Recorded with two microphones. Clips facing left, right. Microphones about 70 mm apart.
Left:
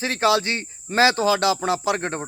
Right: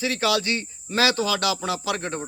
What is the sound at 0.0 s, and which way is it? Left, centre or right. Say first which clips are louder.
Speech: left 3 dB; left.